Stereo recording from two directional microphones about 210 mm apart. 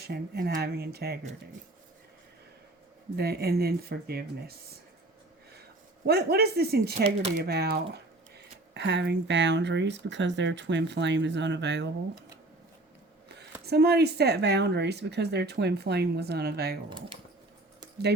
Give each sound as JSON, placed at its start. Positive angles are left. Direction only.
{"t": 0.0, "sound": "speech", "side_deg": -50}
{"t": 3.2, "sound": "speech", "side_deg": -50}
{"t": 6.1, "sound": "speech", "side_deg": -50}
{"t": 13.2, "sound": "speech", "side_deg": -50}